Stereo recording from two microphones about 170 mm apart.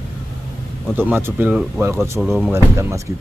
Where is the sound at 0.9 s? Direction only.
10° right (ahead or behind).